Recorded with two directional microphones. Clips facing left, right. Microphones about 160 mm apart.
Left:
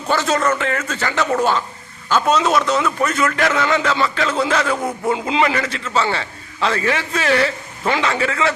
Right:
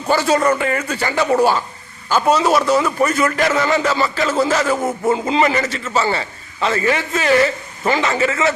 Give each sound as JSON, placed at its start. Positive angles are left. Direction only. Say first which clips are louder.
{"t": 0.1, "sound": "a man's voice", "louder": "right 3 dB", "side_deg": -10}